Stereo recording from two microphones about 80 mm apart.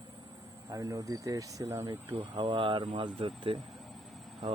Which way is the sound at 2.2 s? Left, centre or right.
Right.